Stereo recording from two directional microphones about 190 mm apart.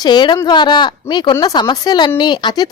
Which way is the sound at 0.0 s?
20° left (ahead or behind).